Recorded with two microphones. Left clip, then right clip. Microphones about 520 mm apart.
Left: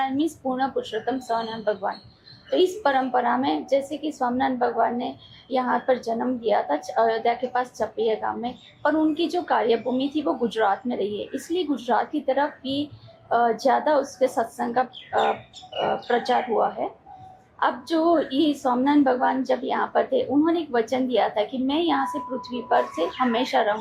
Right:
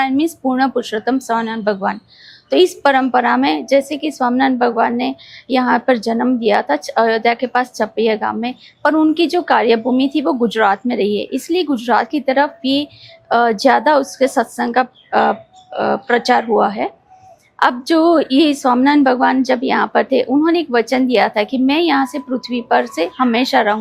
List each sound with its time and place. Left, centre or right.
0.0 s a woman's voice: right